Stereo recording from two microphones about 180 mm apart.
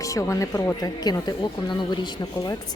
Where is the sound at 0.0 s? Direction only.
20° left (ahead or behind).